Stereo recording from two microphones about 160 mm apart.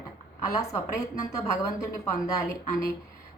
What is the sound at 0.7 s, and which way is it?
A woman's voice, 20° left (ahead or behind).